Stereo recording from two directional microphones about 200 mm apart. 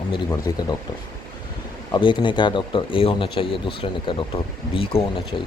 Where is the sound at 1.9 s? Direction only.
25° left (ahead or behind).